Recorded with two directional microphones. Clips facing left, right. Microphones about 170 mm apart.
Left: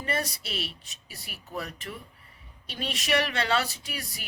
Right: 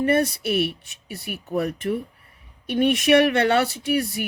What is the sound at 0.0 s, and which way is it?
Speech, 60° right (ahead or behind).